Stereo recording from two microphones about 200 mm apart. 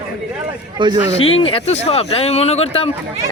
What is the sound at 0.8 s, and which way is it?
Speech, 25° right (ahead or behind).